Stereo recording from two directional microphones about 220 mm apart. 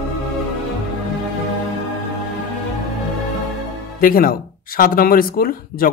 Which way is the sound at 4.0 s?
40° left (ahead or behind).